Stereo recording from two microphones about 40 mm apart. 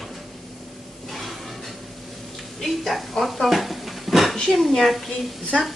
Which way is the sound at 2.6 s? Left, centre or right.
Centre.